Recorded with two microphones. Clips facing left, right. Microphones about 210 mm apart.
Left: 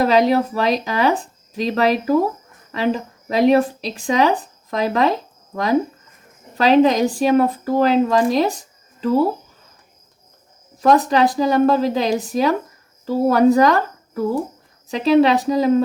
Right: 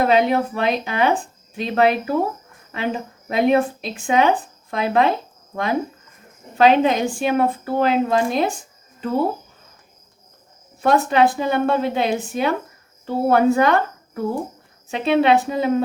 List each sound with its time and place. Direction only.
0.0 s a woman's voice: 35° left (ahead or behind)
10.8 s a woman's voice: 35° left (ahead or behind)